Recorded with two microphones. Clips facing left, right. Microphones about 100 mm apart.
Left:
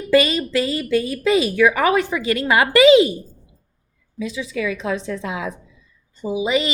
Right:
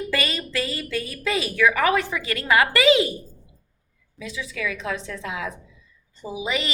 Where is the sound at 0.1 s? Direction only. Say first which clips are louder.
Left 15 dB; 20° left (ahead or behind).